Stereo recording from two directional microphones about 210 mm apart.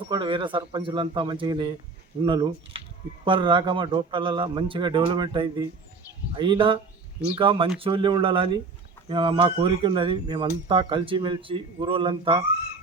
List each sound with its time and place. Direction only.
0.1 s a man's voice: 20° right (ahead or behind)